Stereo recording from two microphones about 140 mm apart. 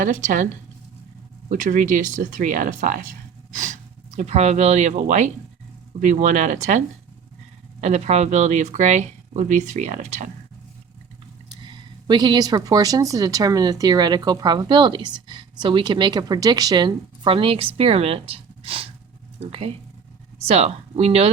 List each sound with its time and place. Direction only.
0.0 s speech: 70° right (ahead or behind)
1.5 s speech: 70° right (ahead or behind)
11.6 s a woman's voice: 35° right (ahead or behind)